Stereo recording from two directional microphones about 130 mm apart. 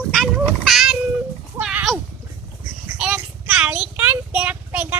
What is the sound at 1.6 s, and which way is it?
Splash, 10° right (ahead or behind).